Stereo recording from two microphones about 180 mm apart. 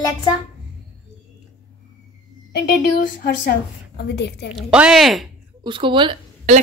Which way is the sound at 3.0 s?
50° left (ahead or behind).